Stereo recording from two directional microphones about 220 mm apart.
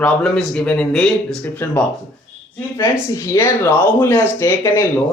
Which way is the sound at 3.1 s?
15° left (ahead or behind).